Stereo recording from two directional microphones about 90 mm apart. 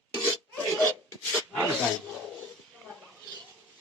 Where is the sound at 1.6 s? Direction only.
10° left (ahead or behind).